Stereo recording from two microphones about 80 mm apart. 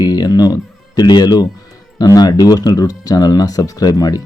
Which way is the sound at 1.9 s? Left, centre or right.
Left.